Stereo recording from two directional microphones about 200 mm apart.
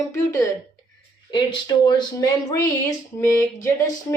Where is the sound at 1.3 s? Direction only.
20° left (ahead or behind).